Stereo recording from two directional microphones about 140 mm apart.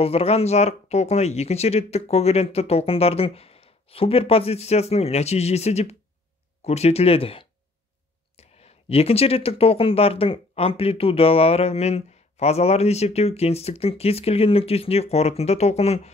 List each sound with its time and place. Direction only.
0.0 s speech: 45° left (ahead or behind)